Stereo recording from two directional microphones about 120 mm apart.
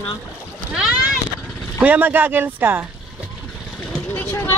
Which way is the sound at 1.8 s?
15° right (ahead or behind).